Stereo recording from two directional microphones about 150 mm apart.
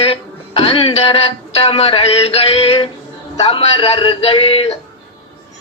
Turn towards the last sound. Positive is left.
turn(degrees=40)  # may be behind; listen again after turning